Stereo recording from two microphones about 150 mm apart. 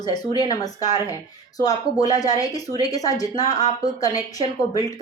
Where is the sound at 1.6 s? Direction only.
25° left (ahead or behind).